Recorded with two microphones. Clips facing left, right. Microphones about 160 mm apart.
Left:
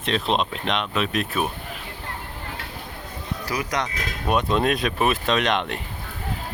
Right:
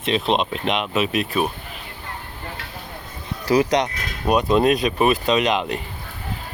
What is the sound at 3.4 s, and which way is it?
Speech, 25° right (ahead or behind).